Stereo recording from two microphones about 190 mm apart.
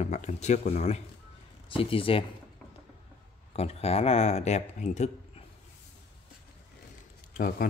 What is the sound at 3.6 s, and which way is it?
Speech, 30° left (ahead or behind).